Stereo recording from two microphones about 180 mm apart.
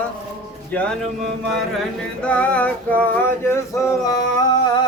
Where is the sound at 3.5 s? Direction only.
20° left (ahead or behind).